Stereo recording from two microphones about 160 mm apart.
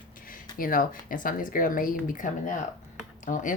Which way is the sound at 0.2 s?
60° left (ahead or behind).